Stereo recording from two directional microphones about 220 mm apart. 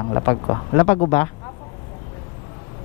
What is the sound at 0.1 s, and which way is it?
Speech, 20° left (ahead or behind).